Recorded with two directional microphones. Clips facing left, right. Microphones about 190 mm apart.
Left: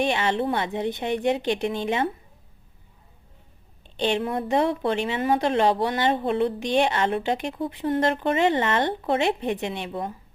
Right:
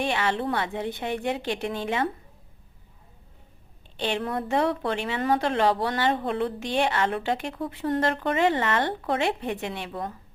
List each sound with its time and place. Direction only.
0.0 s a woman's voice: 20° left (ahead or behind)
3.9 s a woman's voice: 20° left (ahead or behind)